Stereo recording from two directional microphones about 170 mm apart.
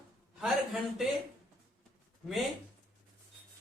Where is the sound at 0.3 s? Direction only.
5° right (ahead or behind).